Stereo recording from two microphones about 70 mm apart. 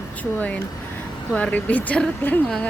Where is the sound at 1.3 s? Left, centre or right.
Left.